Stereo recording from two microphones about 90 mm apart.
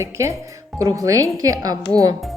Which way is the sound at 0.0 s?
35° right (ahead or behind).